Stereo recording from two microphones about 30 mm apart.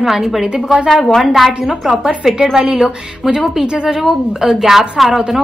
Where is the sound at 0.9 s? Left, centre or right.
Centre.